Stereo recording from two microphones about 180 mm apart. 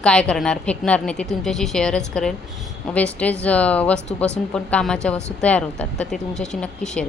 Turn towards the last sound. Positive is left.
turn(degrees=5)  # may be behind; listen again after turning